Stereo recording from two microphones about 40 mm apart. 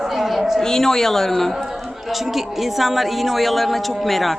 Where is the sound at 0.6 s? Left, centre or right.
Centre.